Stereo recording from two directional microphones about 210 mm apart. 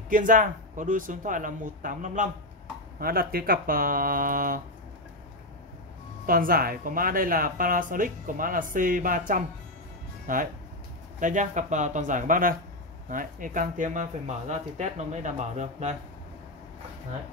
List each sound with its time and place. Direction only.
0.1 s speech: 40° right (ahead or behind)
6.2 s speech: 45° right (ahead or behind)